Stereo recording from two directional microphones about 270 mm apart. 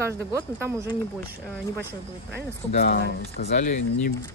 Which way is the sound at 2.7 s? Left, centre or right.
Left.